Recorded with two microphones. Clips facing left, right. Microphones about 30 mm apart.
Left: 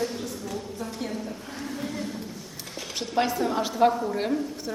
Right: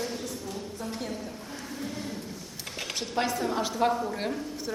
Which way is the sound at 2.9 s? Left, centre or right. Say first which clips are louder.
Left 4 dB; centre.